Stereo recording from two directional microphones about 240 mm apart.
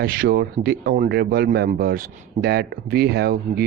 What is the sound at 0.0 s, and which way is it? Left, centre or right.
Speech, right.